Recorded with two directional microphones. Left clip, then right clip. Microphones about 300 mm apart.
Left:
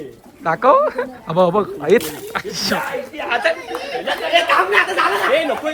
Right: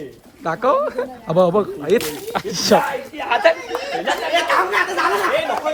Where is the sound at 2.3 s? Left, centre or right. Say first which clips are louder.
Right 1 dB; centre.